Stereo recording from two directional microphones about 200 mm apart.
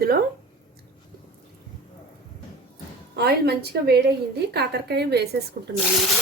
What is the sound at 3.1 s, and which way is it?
A woman's voice, 55° right (ahead or behind).